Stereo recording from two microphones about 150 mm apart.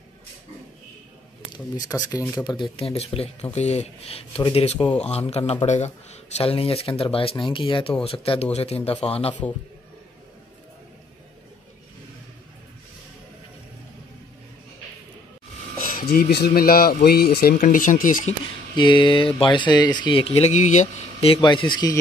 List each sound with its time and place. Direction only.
1.8 s speech: 25° left (ahead or behind); by 5.8 s 50° left (ahead or behind)
6.3 s speech: 40° left (ahead or behind)
15.9 s speech: 90° left; by 18.3 s 60° left (ahead or behind)
18.8 s speech: 30° left (ahead or behind); by 21.3 s 55° left (ahead or behind)
21.3 s speech: 35° left (ahead or behind)